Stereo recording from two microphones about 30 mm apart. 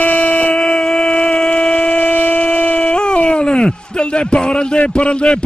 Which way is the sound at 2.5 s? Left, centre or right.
Left.